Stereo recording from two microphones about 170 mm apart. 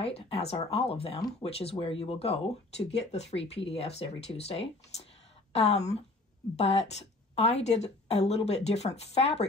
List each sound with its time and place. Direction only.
0.0 s a woman's voice: 35° left (ahead or behind)